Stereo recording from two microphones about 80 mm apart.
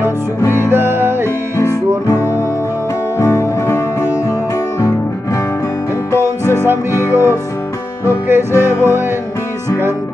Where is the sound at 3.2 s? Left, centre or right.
Left.